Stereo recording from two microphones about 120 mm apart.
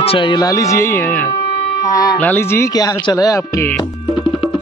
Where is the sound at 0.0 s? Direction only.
45° left (ahead or behind).